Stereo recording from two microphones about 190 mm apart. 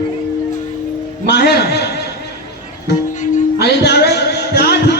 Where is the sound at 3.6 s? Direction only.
60° left (ahead or behind).